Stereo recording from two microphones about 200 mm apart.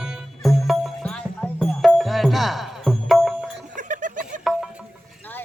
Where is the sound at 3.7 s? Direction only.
40° right (ahead or behind).